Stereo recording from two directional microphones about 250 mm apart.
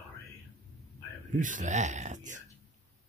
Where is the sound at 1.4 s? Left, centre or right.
Right.